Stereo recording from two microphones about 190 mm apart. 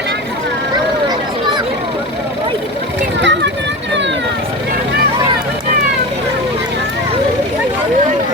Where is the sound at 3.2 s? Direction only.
70° right (ahead or behind).